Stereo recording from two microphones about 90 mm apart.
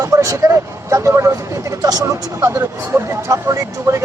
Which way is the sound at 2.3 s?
25° right (ahead or behind).